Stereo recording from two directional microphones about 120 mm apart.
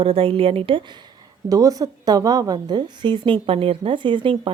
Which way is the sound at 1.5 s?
30° right (ahead or behind).